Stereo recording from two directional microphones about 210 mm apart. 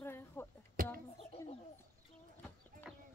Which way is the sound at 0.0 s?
10° left (ahead or behind).